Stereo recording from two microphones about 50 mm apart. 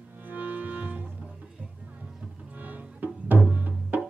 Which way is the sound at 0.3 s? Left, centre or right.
Right.